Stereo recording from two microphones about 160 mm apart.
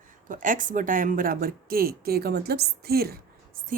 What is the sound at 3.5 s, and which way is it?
Speech, 60° right (ahead or behind).